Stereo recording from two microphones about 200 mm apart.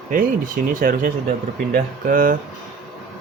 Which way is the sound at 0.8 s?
45° right (ahead or behind).